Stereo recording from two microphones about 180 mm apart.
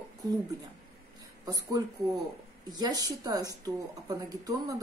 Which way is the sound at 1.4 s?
20° right (ahead or behind).